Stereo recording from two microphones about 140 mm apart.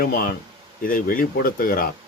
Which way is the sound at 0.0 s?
90° left.